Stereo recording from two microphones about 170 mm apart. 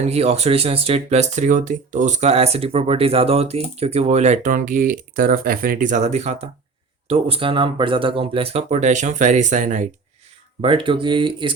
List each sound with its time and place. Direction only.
0.0 s speech: 40° right (ahead or behind)
10.6 s speech: 30° right (ahead or behind)